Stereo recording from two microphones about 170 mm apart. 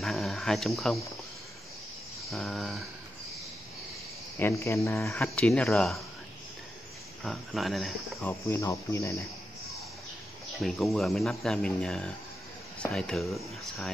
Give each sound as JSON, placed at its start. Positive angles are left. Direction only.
{"t": 0.0, "sound": "speech", "side_deg": 0}
{"t": 2.2, "sound": "speech", "side_deg": 0}
{"t": 4.4, "sound": "speech", "side_deg": 15}
{"t": 7.2, "sound": "speech", "side_deg": 0}
{"t": 8.2, "sound": "speech", "side_deg": 15}
{"t": 10.6, "sound": "speech", "side_deg": 0}